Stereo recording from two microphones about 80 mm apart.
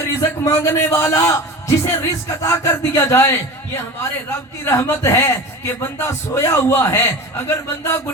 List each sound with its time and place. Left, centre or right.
0.1 s speech: left
4.6 s speech: left